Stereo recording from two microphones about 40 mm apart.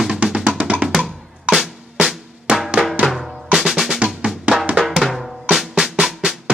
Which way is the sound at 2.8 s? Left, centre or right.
Centre.